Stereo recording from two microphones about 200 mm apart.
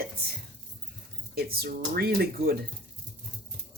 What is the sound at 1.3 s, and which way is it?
Speech, 50° right (ahead or behind).